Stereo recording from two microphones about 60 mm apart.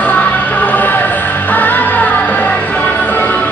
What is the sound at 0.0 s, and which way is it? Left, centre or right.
Music, left.